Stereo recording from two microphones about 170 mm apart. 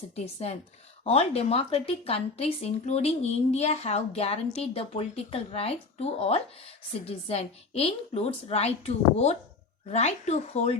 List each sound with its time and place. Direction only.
0.4 s a woman's voice: 40° left (ahead or behind)